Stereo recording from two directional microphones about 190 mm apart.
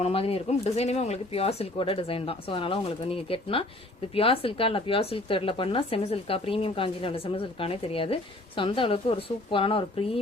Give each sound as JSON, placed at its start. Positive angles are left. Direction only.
{"t": 0.0, "sound": "speech", "side_deg": 30}